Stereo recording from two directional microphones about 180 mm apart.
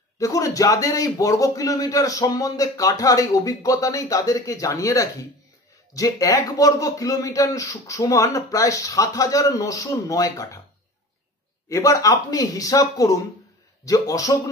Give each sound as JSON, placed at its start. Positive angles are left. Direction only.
{"t": 0.2, "sound": "a man's voice", "side_deg": 20}
{"t": 11.7, "sound": "a man's voice", "side_deg": 20}